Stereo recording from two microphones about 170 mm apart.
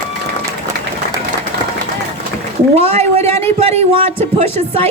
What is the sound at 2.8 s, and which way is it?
A man's voice, 35° right (ahead or behind).